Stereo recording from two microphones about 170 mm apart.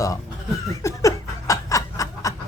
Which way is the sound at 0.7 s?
20° left (ahead or behind).